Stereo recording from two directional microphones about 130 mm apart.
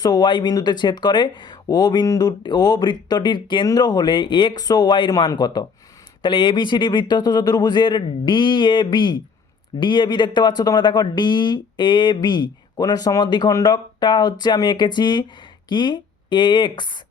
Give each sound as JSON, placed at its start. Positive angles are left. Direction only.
{"t": 0.0, "sound": "speech", "side_deg": 30}